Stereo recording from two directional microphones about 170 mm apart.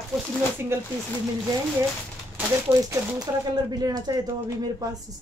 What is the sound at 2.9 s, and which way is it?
A woman's voice, 20° right (ahead or behind).